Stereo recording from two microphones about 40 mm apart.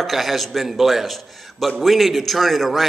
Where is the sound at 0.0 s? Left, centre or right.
Centre.